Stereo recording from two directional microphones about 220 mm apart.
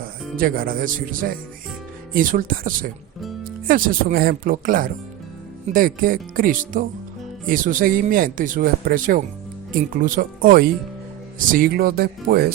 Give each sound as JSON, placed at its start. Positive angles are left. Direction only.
{"t": 0.3, "sound": "speech", "side_deg": -40}